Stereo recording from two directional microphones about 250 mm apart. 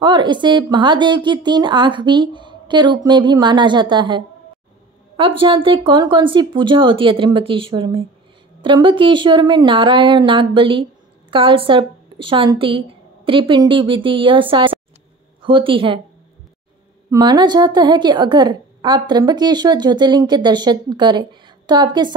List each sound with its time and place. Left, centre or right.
0.0 s a woman's voice: centre
17.1 s a woman's voice: centre